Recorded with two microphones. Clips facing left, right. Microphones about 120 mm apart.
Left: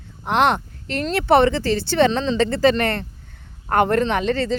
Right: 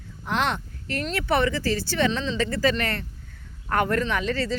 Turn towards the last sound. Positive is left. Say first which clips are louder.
# left 5 dB
turn(degrees=25)  # may be behind; listen again after turning